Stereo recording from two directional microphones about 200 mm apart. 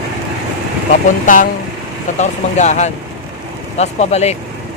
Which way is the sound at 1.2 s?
40° left (ahead or behind).